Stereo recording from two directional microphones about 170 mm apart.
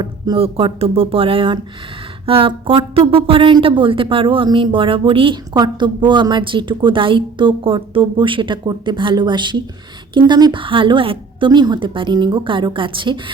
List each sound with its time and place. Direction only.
0.0 s speech: 30° right (ahead or behind)